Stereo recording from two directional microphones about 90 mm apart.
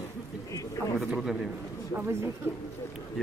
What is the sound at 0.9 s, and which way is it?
Speech, centre (ahead or behind).